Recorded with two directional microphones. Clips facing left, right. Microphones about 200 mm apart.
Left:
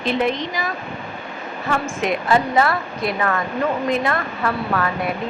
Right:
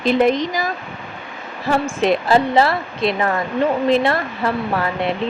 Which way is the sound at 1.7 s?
30° right (ahead or behind).